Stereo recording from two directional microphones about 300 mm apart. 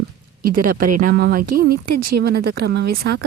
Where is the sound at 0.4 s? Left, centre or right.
Right.